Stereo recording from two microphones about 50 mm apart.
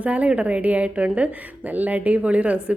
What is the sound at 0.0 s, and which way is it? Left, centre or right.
A woman's voice, right.